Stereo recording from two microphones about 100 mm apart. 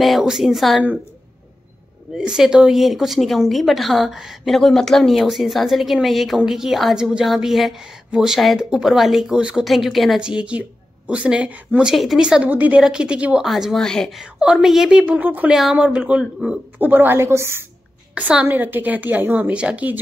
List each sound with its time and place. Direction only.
0.0 s speech: centre (ahead or behind)
2.1 s speech: 5° right (ahead or behind)
11.9 s a woman's voice: centre (ahead or behind)
15.5 s a woman's voice: 5° right (ahead or behind); by 17.6 s 25° right (ahead or behind)
18.1 s a woman's voice: 15° right (ahead or behind)